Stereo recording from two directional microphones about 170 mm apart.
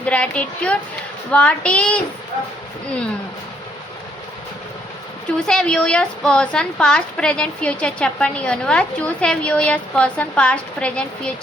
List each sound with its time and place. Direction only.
0.0 s a woman's voice: 5° left (ahead or behind)
5.5 s a woman's voice: 5° left (ahead or behind)